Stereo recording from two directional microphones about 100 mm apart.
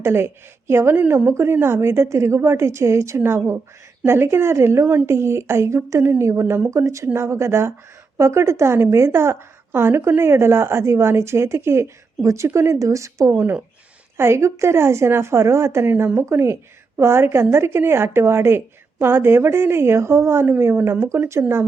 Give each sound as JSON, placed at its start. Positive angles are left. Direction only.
{"t": 0.0, "sound": "a woman's voice", "side_deg": -25}